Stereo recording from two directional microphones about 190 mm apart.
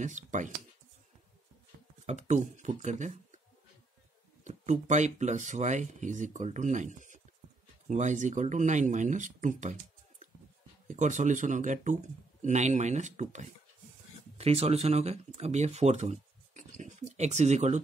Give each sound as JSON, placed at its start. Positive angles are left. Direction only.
{"t": 0.0, "sound": "speech", "side_deg": -40}
{"t": 2.0, "sound": "speech", "side_deg": -40}
{"t": 4.5, "sound": "speech", "side_deg": -40}